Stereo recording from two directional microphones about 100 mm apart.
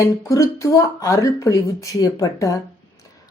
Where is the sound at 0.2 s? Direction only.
30° left (ahead or behind).